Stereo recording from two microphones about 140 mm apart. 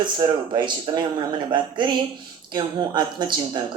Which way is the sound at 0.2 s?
35° right (ahead or behind).